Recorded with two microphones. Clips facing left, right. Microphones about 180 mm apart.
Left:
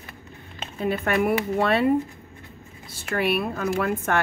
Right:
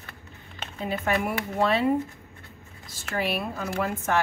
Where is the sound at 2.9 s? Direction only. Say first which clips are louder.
Left 4 dB; 60° left (ahead or behind).